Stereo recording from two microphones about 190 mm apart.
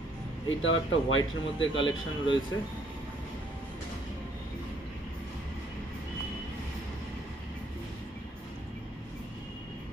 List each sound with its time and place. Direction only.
0.5 s speech: 90° left